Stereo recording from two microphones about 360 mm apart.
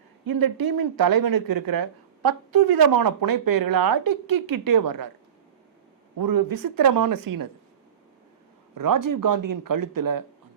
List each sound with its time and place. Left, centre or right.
0.3 s speech: right
6.1 s speech: right
8.7 s speech: right